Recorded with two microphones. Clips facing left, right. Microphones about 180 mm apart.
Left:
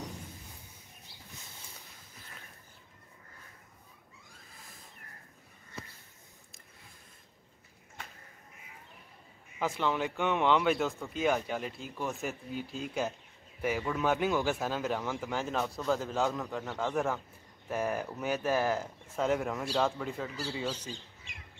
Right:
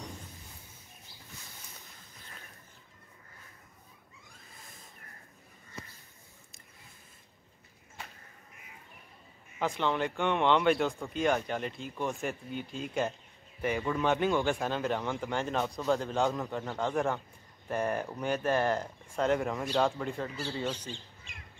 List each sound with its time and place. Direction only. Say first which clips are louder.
9.6 s speech: right 1 dB; 5° left (ahead or behind)